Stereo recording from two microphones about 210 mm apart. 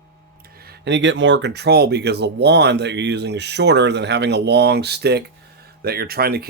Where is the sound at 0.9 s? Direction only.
60° right (ahead or behind).